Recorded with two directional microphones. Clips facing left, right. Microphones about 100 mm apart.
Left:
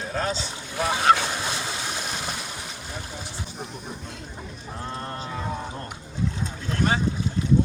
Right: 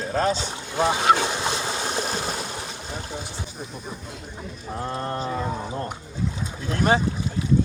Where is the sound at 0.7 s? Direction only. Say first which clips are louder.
Right 1 dB; 25° right (ahead or behind).